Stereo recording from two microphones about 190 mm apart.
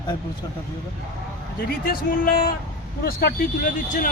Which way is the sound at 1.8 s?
50° left (ahead or behind).